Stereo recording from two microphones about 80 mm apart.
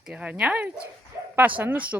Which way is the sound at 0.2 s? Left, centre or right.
Centre.